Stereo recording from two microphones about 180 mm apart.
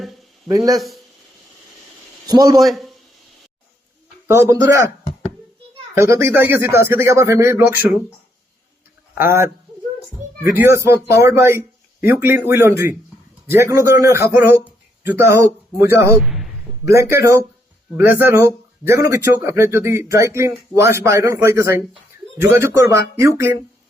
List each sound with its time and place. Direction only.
0.4 s speech: 20° right (ahead or behind)
2.2 s speech: 20° right (ahead or behind)
2.6 s a man's voice: centre (ahead or behind)
4.3 s speech: 15° right (ahead or behind)
6.0 s speech: 15° right (ahead or behind)
9.1 s speech: 15° right (ahead or behind)
16.2 s a sound: centre (ahead or behind)
16.8 s speech: 15° right (ahead or behind)